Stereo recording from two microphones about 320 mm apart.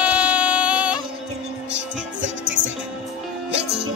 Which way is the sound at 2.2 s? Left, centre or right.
Right.